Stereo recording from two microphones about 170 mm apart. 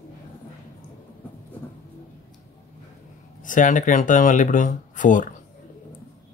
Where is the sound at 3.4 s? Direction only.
50° left (ahead or behind).